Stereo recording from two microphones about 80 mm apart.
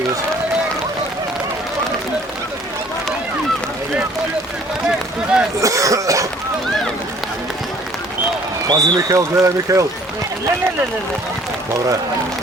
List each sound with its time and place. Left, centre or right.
4.9 s run: centre
5.5 s cough: right
8.7 s speech: right